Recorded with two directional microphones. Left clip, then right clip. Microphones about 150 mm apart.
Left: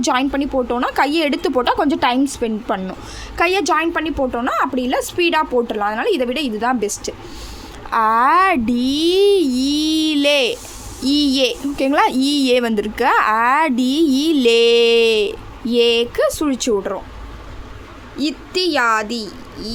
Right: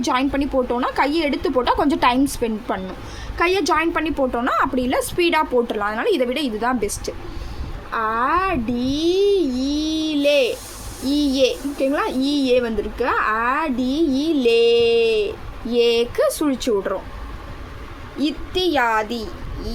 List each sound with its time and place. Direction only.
0.0 s a woman's voice: 25° left (ahead or behind)
1.6 s a woman's voice: 20° left (ahead or behind)
7.9 s a woman's voice: 50° left (ahead or behind); by 16.6 s 20° left (ahead or behind)
18.2 s a woman's voice: 30° left (ahead or behind)